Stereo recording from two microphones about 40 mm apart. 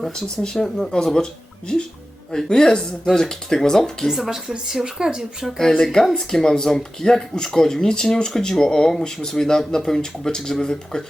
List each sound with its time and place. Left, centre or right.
0.4 s speech: centre
4.1 s speech: centre
5.8 s speech: centre